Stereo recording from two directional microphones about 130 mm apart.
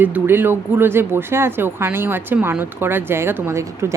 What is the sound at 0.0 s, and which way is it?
Speech, 15° right (ahead or behind).